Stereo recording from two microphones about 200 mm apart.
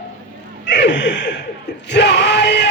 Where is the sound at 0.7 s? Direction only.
60° left (ahead or behind).